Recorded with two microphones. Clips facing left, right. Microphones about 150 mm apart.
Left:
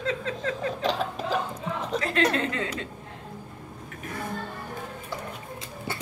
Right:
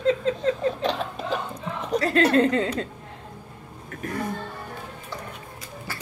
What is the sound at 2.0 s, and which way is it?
Speech, 40° right (ahead or behind).